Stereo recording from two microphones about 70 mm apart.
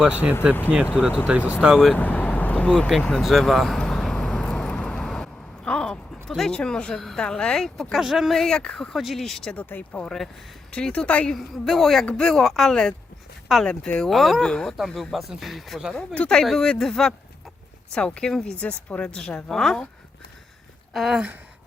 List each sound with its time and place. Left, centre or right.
0.0 s speech: centre
1.6 s speech: centre
1.9 s vehicle: left; by 7.2 s centre
7.2 s a woman's voice: centre
9.6 s speech: left
10.0 s a woman's voice: centre
11.3 s a woman's voice: centre
14.8 s speech: centre
16.1 s a woman's voice: centre
20.9 s speech: centre